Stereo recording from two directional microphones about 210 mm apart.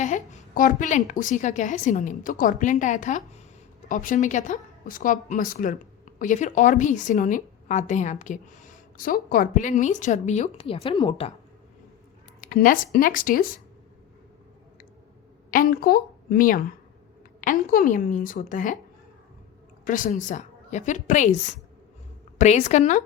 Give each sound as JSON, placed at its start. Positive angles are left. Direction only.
{"t": 0.0, "sound": "a woman's voice", "side_deg": 35}
{"t": 12.4, "sound": "a woman's voice", "side_deg": 40}
{"t": 15.4, "sound": "a woman's voice", "side_deg": 40}
{"t": 19.8, "sound": "a woman's voice", "side_deg": 40}
{"t": 22.4, "sound": "a woman's voice", "side_deg": 30}